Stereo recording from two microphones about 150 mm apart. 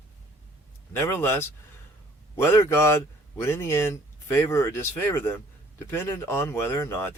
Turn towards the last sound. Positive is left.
turn(degrees=15)  # may be behind; listen again after turning